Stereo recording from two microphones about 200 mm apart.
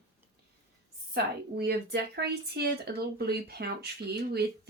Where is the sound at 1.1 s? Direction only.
55° right (ahead or behind).